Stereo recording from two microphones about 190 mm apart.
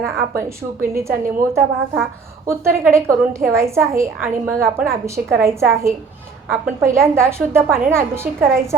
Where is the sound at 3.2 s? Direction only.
15° right (ahead or behind).